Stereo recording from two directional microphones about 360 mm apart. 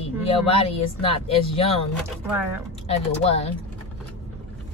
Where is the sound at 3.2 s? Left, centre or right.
Centre.